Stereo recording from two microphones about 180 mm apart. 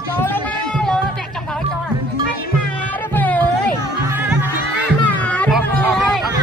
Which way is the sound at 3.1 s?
10° left (ahead or behind).